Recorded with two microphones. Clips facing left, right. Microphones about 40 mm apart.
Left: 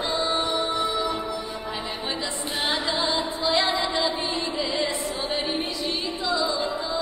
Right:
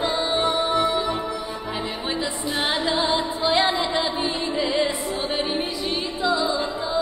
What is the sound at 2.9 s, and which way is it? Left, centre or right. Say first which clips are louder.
Music: right 3 dB; centre.